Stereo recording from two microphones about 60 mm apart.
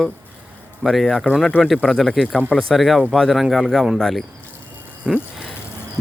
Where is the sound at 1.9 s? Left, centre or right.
Centre.